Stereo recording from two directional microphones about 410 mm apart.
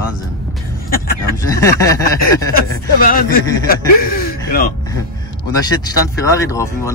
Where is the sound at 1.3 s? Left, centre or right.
Centre.